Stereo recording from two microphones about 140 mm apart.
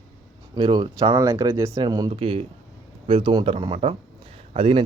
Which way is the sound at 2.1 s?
40° right (ahead or behind).